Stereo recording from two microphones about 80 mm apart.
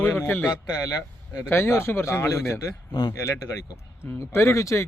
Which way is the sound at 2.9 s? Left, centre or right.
Left.